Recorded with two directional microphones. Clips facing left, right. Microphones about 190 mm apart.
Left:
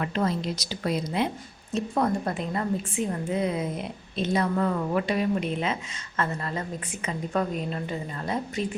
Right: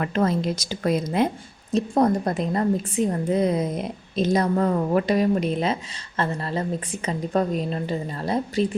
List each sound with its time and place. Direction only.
0.0 s a woman's voice: 50° right (ahead or behind); by 8.6 s 35° right (ahead or behind)